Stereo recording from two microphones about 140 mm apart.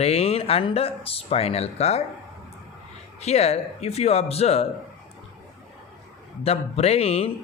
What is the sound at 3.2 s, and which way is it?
Speech, 50° left (ahead or behind).